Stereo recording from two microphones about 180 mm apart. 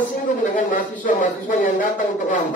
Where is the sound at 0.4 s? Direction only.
50° left (ahead or behind).